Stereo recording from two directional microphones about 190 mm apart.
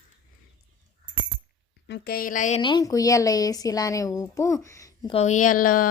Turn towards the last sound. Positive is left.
turn(degrees=45)  # may be behind; listen again after turning